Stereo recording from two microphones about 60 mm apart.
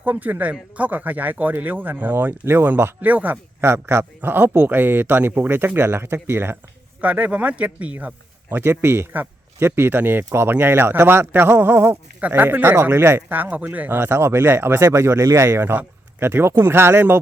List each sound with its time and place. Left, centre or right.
0.0 s speech: right
3.6 s speech: right
7.0 s speech: right
8.4 s speech: right
12.6 s speech: right
13.2 s speech: right
14.8 s speech: right
15.4 s speech: right